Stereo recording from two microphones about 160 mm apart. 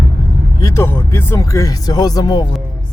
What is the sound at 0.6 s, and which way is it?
Speech, 20° left (ahead or behind).